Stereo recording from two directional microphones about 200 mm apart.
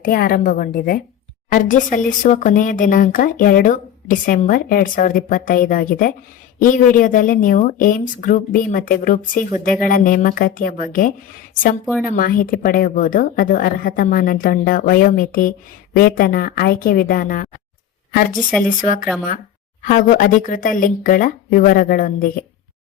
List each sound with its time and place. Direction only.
0.0 s a woman's voice: 45° left (ahead or behind)